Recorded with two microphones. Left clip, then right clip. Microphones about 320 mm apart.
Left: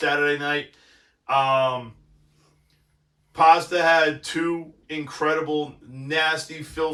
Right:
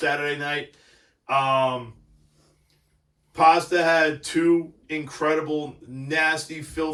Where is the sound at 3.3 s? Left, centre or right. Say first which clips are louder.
Left 1 dB; centre.